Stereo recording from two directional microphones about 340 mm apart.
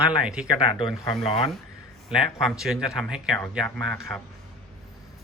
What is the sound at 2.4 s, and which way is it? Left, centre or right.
Speech, centre.